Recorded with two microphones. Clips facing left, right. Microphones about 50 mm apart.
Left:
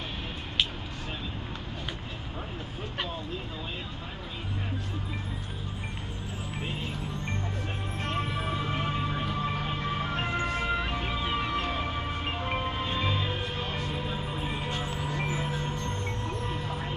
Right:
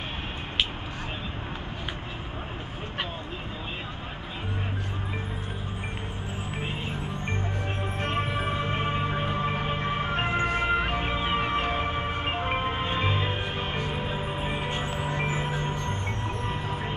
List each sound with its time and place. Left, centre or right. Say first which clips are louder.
6.5 s music: right 2 dB; right